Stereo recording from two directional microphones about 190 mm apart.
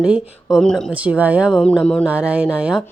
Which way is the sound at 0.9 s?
5° right (ahead or behind).